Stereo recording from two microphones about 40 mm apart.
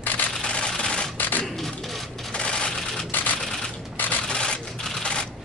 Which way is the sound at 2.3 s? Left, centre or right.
Left.